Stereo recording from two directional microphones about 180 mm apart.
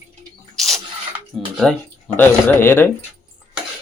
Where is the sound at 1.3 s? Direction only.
Centre (ahead or behind).